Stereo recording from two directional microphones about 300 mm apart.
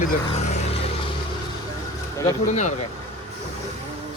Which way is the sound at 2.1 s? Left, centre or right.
Centre.